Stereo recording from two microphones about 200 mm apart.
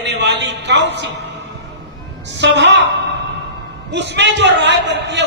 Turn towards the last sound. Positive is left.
turn(degrees=-60)  # may be behind; listen again after turning